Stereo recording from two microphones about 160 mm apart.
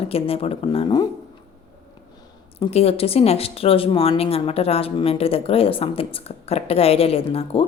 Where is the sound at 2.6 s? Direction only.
40° left (ahead or behind).